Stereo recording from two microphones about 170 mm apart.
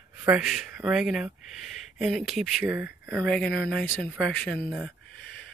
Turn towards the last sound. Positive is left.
turn(degrees=5)  # may be behind; listen again after turning